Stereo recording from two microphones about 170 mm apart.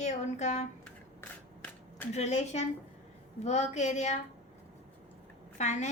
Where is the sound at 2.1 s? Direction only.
40° left (ahead or behind).